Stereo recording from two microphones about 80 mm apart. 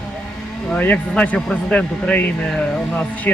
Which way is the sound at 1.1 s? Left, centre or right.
Centre.